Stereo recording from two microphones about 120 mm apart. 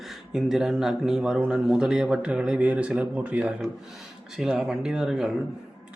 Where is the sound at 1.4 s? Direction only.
5° right (ahead or behind).